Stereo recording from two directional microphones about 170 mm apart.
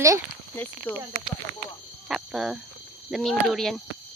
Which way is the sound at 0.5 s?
10° left (ahead or behind).